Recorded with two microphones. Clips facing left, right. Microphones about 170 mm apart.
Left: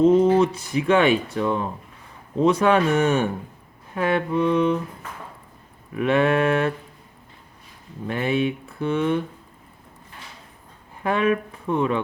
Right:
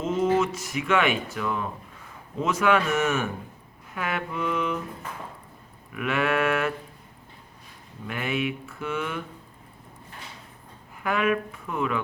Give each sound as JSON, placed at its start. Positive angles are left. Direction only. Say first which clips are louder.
{"t": 0.0, "sound": "speech", "louder": "left 8 dB", "side_deg": 35}
{"t": 5.9, "sound": "speech", "louder": "left 6 dB", "side_deg": 35}
{"t": 8.0, "sound": "speech", "louder": "left 6 dB", "side_deg": 35}
{"t": 11.0, "sound": "speech", "louder": "left 4 dB", "side_deg": 30}